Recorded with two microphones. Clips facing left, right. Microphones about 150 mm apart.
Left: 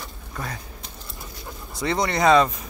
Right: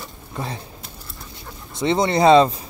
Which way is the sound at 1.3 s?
25° right (ahead or behind).